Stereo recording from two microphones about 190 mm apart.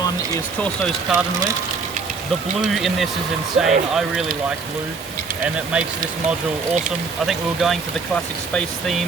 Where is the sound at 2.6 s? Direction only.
Centre (ahead or behind).